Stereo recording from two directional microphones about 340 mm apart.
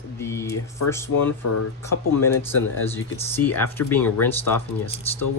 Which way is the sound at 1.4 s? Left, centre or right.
Left.